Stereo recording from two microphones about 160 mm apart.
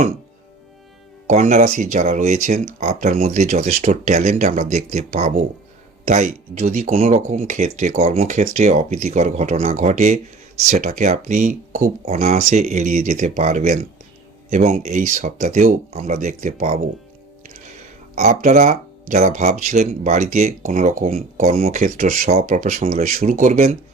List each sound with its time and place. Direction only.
1.3 s speech: 45° right (ahead or behind)
18.1 s speech: 45° right (ahead or behind)